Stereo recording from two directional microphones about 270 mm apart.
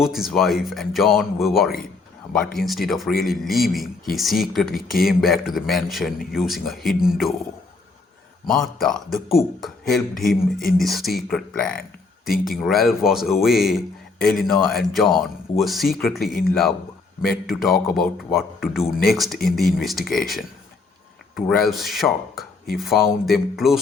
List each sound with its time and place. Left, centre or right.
0.0 s a man's voice: centre
8.4 s a man's voice: centre
10.2 s speech: left
10.8 s a man's voice: centre
21.3 s a man's voice: centre